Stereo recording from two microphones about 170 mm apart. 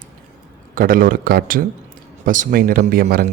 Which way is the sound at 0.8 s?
55° right (ahead or behind).